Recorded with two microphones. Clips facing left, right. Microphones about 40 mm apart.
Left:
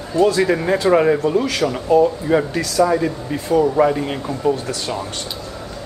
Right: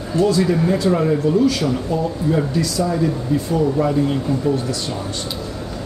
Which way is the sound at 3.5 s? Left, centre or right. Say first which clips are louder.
Left 5 dB; left.